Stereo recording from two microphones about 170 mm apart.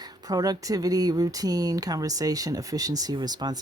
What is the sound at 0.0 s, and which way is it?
Speech, 20° right (ahead or behind).